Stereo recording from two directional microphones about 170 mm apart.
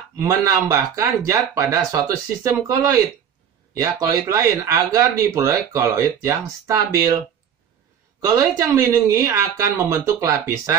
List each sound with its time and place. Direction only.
0.2 s speech: 15° right (ahead or behind)
8.2 s speech: 20° right (ahead or behind)